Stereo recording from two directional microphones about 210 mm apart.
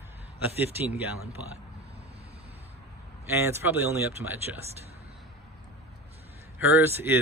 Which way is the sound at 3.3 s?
10° right (ahead or behind).